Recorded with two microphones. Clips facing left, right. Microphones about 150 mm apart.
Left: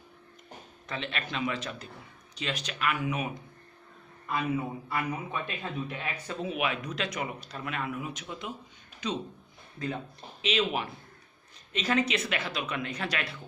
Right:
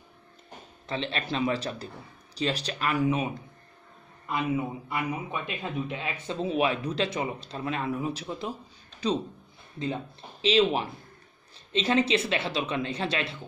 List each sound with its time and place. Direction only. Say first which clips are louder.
0.8 s a man's voice: right 5 dB; 30° right (ahead or behind)
4.3 s a man's voice: right 2 dB; 20° right (ahead or behind)
10.4 s a man's voice: right 6 dB; 30° right (ahead or behind)